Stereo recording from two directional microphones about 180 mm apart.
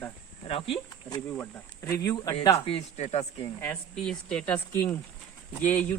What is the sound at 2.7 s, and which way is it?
Speech, 40° left (ahead or behind).